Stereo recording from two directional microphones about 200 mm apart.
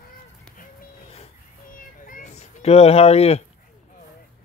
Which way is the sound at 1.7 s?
45° left (ahead or behind).